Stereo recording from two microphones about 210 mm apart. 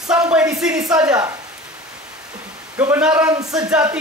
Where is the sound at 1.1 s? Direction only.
15° right (ahead or behind).